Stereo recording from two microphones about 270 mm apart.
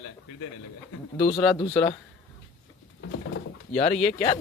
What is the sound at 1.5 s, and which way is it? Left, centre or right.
Speech, centre.